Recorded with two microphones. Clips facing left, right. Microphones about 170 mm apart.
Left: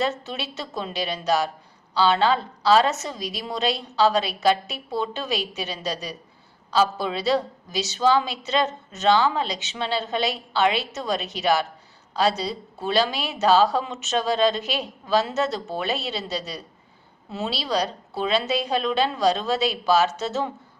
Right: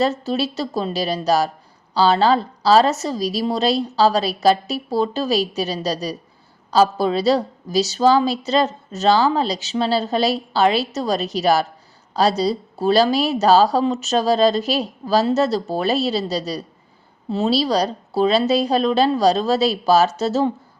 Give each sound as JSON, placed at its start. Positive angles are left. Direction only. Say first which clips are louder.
{"t": 0.0, "sound": "a woman's voice", "louder": "right 7 dB", "side_deg": -35}